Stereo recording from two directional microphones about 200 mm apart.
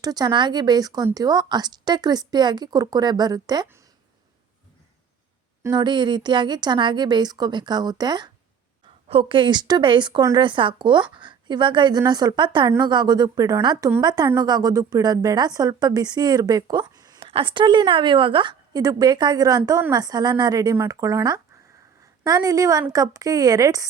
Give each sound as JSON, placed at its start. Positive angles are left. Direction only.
{"t": 0.0, "sound": "a woman's voice", "side_deg": -20}
{"t": 5.6, "sound": "a woman's voice", "side_deg": -20}